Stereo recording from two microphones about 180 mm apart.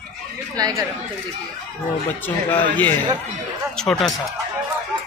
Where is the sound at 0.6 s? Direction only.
20° right (ahead or behind).